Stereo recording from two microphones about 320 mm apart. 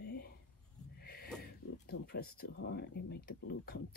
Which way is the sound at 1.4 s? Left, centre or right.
Left.